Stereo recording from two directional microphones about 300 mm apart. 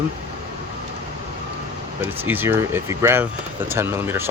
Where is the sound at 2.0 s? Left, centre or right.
Centre.